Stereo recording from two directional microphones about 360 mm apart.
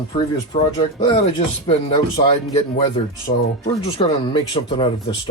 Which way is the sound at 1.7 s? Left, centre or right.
Centre.